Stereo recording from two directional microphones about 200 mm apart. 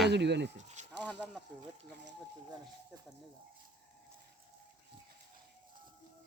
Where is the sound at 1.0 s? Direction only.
5° left (ahead or behind).